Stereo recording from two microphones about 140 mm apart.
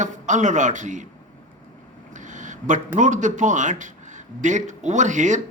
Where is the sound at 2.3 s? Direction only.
60° right (ahead or behind).